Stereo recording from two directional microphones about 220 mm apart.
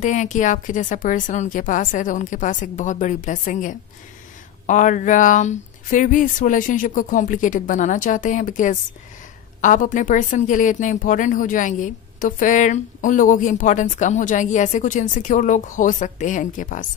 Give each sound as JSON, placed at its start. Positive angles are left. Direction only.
{"t": 0.0, "sound": "a woman's voice", "side_deg": 35}